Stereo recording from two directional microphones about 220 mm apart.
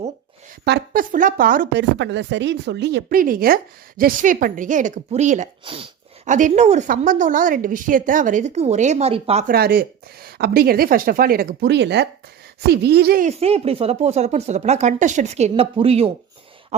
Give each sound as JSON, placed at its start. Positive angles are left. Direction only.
{"t": 0.6, "sound": "speech", "side_deg": -45}
{"t": 1.8, "sound": "speech", "side_deg": -55}
{"t": 9.5, "sound": "speech", "side_deg": -45}
{"t": 13.2, "sound": "speech", "side_deg": -25}